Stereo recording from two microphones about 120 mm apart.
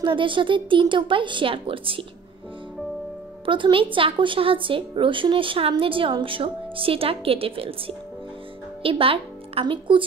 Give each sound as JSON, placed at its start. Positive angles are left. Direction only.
{"t": 0.0, "sound": "a woman's voice", "side_deg": -45}
{"t": 3.4, "sound": "a woman's voice", "side_deg": -45}